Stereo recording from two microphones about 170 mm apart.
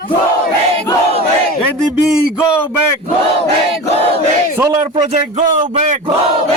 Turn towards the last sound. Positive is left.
turn(degrees=-40)  # may be behind; listen again after turning